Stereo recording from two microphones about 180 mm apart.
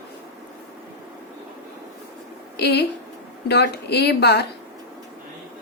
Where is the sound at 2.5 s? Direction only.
65° left (ahead or behind).